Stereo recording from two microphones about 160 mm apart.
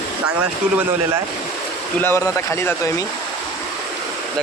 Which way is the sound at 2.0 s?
15° left (ahead or behind).